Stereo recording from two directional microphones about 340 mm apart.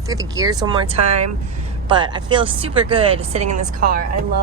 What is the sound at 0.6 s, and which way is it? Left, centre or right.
Speech, centre.